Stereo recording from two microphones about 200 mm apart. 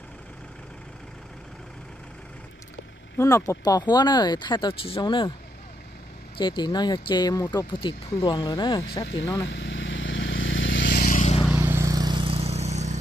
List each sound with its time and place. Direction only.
3.2 s speech: 15° left (ahead or behind)
6.3 s speech: 25° left (ahead or behind)
9.5 s vehicle: 65° left (ahead or behind); by 11.4 s 35° left (ahead or behind)
11.5 s vehicle: 10° right (ahead or behind); by 12.9 s 35° right (ahead or behind)